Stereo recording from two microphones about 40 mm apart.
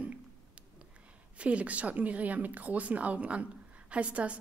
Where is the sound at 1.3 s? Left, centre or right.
Right.